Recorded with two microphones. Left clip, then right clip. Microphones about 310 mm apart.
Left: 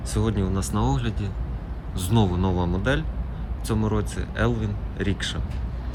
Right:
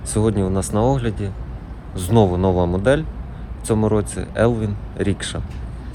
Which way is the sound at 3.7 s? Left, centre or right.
Centre.